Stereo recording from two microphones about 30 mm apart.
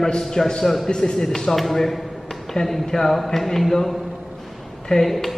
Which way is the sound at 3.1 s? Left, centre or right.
Centre.